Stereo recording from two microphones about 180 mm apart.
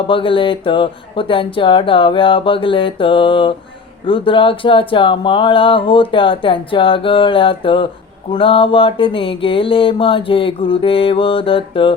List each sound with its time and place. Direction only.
0.1 s speech: 30° left (ahead or behind)